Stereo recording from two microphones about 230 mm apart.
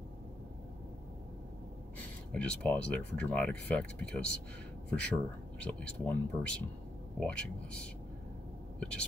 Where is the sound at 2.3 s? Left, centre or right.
Centre.